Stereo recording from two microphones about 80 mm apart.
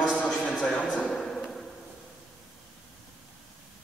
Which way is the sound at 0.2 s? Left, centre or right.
Centre.